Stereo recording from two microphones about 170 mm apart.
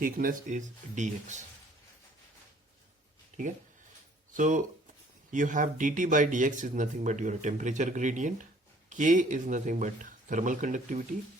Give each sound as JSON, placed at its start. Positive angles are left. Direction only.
{"t": 0.0, "sound": "speech", "side_deg": -55}
{"t": 3.3, "sound": "a sound", "side_deg": -45}
{"t": 4.4, "sound": "speech", "side_deg": -50}